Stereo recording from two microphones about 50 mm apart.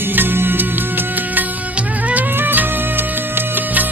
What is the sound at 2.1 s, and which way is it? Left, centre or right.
Music, right.